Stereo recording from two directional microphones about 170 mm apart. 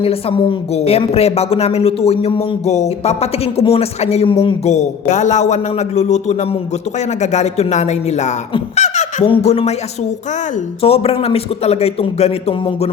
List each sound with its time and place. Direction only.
0.0 s a woman's voice: 35° left (ahead or behind)
10.8 s a woman's voice: 35° left (ahead or behind)